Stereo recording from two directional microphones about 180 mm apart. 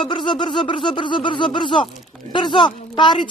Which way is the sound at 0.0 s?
25° left (ahead or behind).